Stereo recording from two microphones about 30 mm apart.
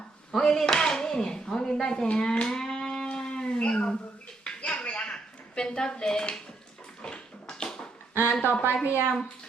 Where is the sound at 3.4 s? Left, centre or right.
Left.